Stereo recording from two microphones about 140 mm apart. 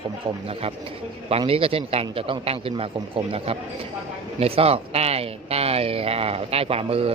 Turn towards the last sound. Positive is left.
turn(degrees=-45)  # may be behind; listen again after turning